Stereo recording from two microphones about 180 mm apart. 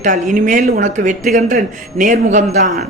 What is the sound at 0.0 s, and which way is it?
Speech, 45° right (ahead or behind).